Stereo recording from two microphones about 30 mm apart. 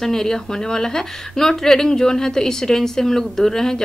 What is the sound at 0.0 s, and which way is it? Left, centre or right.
A woman's voice, centre.